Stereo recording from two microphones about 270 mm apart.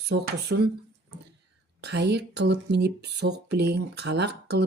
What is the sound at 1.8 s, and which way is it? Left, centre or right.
Speech, right.